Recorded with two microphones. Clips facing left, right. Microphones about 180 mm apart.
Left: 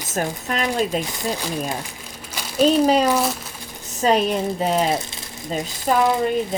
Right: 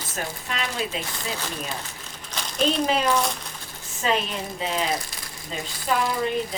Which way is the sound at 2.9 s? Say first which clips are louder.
Left 6 dB; 40° left (ahead or behind).